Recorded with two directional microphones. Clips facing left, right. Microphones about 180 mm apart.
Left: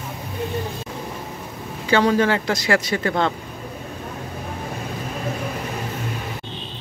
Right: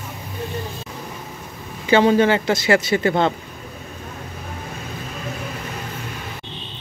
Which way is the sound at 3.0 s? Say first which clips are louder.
Right 3 dB; 25° right (ahead or behind).